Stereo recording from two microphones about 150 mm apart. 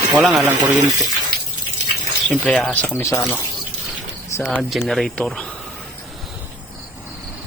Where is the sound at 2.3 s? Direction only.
5° left (ahead or behind).